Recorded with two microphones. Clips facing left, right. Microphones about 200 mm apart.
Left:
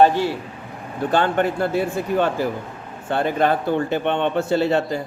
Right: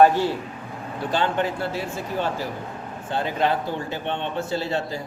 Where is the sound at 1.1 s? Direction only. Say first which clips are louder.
Left 4 dB; 55° left (ahead or behind).